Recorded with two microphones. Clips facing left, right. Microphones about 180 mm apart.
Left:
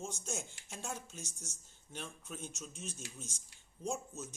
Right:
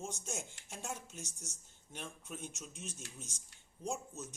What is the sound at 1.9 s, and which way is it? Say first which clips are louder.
Speech: even; 15° right (ahead or behind).